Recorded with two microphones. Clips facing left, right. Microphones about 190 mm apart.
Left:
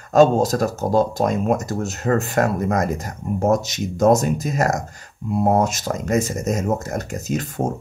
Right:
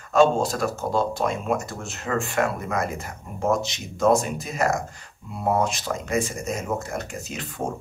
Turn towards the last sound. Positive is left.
turn(degrees=40)  # may be behind; listen again after turning